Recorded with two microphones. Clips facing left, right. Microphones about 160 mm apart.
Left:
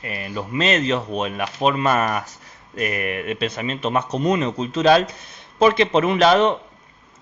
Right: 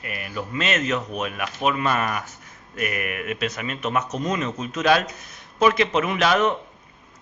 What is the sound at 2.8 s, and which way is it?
A man's voice, 30° left (ahead or behind).